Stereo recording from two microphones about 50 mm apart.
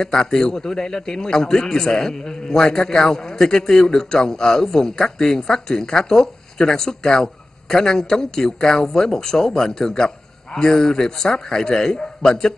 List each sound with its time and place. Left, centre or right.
0.0 s a man's voice: centre
10.0 s a sound: centre
10.7 s a man's voice: centre